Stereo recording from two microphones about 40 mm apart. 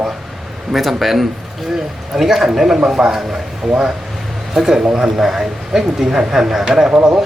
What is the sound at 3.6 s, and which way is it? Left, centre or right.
Speech, centre.